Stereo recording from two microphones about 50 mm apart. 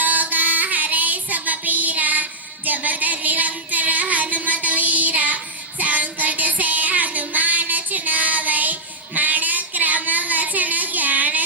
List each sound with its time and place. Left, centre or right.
0.0 s child singing: right
2.6 s music: right
4.6 s child singing: right